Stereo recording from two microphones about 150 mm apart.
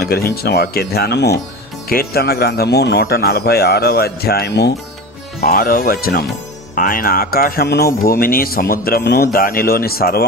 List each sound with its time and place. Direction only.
0.0 s speech: 90° left
6.7 s speech: 70° left (ahead or behind); by 8.0 s 90° left
8.1 s speech: 75° left (ahead or behind)
9.3 s speech: 75° left (ahead or behind); by 10.2 s 90° left